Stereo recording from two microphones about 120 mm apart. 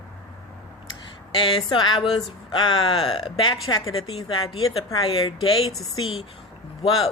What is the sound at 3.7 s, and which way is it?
A woman's voice, 30° left (ahead or behind).